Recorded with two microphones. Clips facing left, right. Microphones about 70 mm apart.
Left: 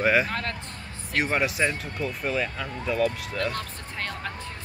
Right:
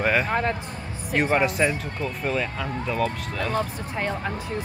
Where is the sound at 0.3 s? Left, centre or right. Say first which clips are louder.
Right 7 dB; centre.